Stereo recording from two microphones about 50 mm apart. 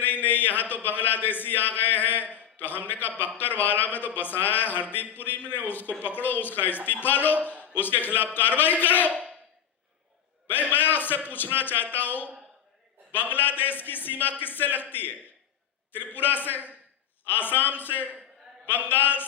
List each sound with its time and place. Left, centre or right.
0.0 s a man's voice: left
7.3 s a man's voice: right
7.8 s speech: left
10.7 s a man's voice: left
16.1 s speech: left